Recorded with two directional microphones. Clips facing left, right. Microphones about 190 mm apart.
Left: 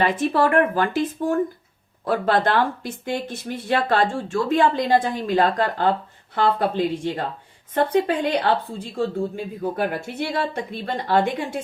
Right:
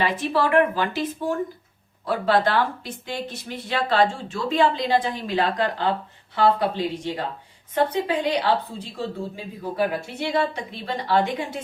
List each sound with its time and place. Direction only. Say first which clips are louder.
0.0 s speech: left 3 dB; 50° left (ahead or behind)
2.0 s speech: left 1 dB; 50° left (ahead or behind)